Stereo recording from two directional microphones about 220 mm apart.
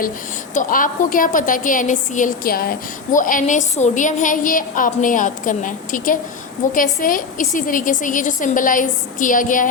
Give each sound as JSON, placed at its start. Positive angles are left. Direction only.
{"t": 0.5, "sound": "a woman's voice", "side_deg": 35}